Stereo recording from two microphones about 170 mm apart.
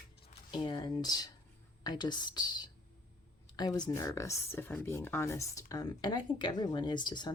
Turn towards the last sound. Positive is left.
turn(degrees=25)  # may be behind; listen again after turning